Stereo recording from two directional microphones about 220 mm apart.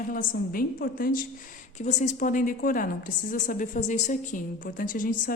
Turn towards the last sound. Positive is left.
turn(degrees=40)  # may be behind; listen again after turning